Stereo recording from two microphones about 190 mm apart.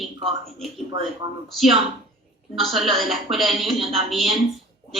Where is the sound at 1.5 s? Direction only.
Centre (ahead or behind).